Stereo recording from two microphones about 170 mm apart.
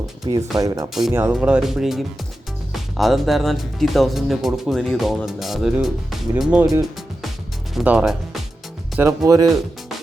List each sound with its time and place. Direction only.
0.2 s speech: 25° right (ahead or behind)
1.1 s speech: 10° right (ahead or behind)
9.0 s speech: 20° right (ahead or behind)